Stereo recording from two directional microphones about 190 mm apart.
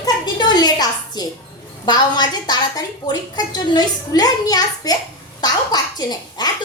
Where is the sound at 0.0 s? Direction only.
20° left (ahead or behind).